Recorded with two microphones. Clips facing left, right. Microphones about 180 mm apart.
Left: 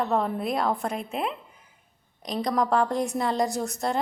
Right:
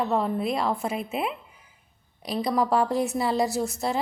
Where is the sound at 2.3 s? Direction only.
5° right (ahead or behind).